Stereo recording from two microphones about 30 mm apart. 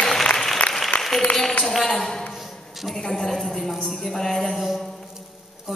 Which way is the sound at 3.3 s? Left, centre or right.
Centre.